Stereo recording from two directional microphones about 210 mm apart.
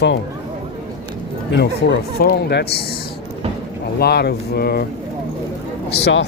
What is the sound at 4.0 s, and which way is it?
Speech, 50° left (ahead or behind).